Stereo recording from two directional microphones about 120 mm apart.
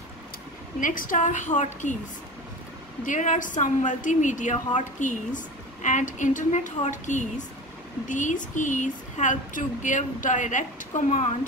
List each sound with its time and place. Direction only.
0.7 s a woman's voice: 90° left
3.1 s a woman's voice: 90° left